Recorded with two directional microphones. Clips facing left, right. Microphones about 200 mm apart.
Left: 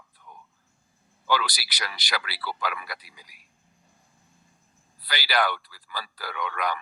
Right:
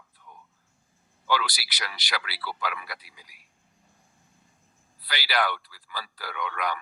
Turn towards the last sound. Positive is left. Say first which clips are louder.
# left 1 dB
turn(degrees=40)  # may be behind; listen again after turning